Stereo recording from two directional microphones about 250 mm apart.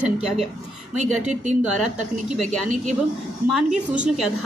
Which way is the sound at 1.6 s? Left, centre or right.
Centre.